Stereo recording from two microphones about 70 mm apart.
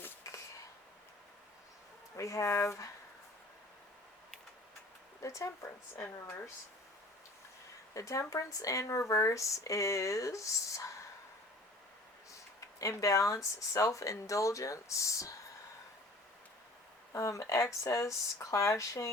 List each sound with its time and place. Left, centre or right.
2.1 s speech: left
5.2 s speech: left
7.9 s speech: left
12.5 s speech: left
17.1 s speech: left